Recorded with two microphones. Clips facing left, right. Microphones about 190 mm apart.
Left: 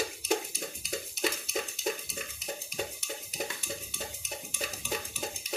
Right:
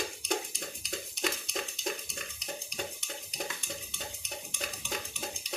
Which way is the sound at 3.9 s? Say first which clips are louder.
Left 2 dB; 5° left (ahead or behind).